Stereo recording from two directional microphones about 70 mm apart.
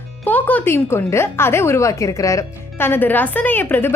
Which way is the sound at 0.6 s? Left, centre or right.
Left.